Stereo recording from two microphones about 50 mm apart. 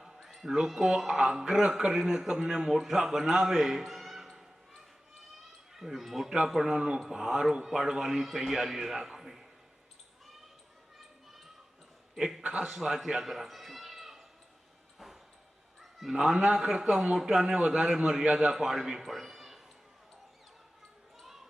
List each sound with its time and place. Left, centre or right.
0.0 s a sound: centre
0.5 s a man's voice: centre
6.6 s a man's voice: centre
10.9 s children playing: centre
12.1 s a man's voice: centre
12.4 s a man's voice: right
12.7 s speech: centre
14.9 s a sound: centre
15.8 s a man's voice: centre
17.2 s a man's voice: centre
19.0 s a sound: centre
21.2 s basketball bounce: centre